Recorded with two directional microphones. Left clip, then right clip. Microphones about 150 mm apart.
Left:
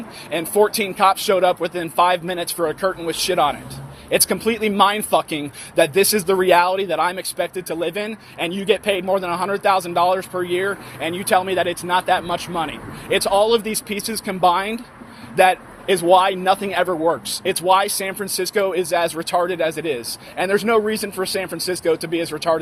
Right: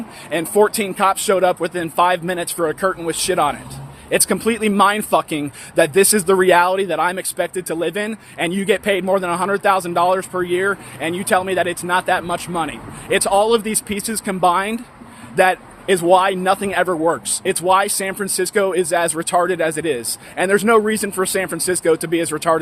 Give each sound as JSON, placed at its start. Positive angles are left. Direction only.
{"t": 0.5, "sound": "speech", "side_deg": -45}